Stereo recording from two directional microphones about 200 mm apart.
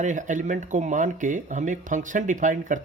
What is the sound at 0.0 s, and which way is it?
Speech, 40° right (ahead or behind).